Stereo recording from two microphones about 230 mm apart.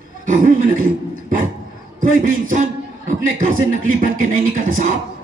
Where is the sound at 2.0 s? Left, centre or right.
Right.